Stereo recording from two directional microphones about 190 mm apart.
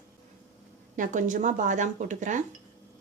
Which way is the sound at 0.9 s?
40° right (ahead or behind).